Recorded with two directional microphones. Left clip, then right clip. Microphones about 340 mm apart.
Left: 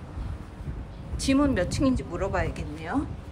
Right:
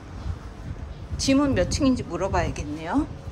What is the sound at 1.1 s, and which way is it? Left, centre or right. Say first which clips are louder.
Speech: right 2 dB; centre.